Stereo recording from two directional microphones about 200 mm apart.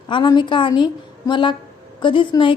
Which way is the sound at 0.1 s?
25° left (ahead or behind).